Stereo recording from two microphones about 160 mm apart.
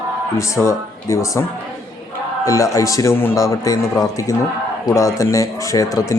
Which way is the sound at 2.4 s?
20° left (ahead or behind).